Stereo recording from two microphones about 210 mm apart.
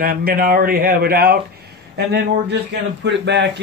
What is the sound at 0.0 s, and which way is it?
Speech, 45° right (ahead or behind).